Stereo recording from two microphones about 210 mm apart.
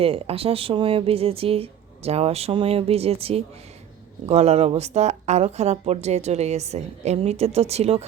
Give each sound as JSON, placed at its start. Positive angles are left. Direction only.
{"t": 0.0, "sound": "speech", "side_deg": -25}